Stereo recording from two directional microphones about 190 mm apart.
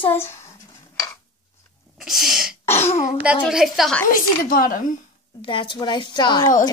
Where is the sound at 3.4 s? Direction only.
Centre (ahead or behind).